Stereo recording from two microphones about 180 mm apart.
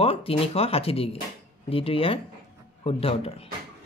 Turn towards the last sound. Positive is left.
turn(degrees=35)  # may be behind; listen again after turning